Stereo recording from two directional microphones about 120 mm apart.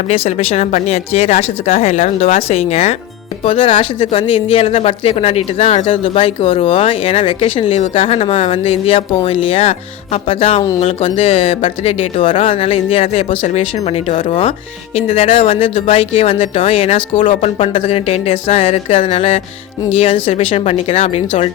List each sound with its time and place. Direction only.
0.3 s speech: 65° left (ahead or behind)
3.4 s speech: 45° left (ahead or behind)